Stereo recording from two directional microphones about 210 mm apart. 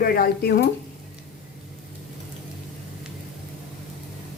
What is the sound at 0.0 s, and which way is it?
Speech, 45° left (ahead or behind).